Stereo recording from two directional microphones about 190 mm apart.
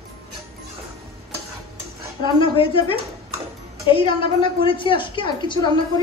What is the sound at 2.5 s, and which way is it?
A woman's voice, 30° left (ahead or behind).